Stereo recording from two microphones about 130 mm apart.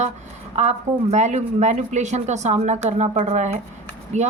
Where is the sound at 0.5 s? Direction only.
60° right (ahead or behind).